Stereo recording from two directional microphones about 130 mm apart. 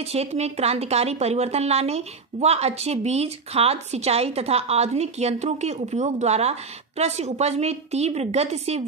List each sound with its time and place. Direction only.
0.0 s speech: 50° right (ahead or behind)